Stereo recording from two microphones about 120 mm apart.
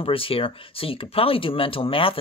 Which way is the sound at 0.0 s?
50° left (ahead or behind).